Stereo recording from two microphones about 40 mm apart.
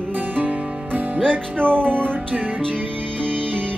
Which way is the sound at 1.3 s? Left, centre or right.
Right.